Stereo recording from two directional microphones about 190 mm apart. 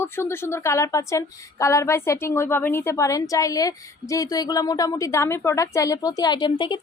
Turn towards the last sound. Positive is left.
turn(degrees=25)  # may be behind; listen again after turning